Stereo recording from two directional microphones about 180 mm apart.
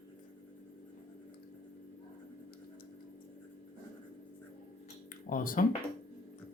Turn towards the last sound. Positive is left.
turn(degrees=50)  # may be behind; listen again after turning